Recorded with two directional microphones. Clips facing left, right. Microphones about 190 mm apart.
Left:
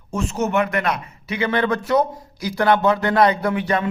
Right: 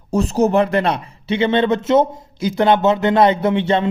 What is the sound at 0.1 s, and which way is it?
A man's voice, 35° right (ahead or behind).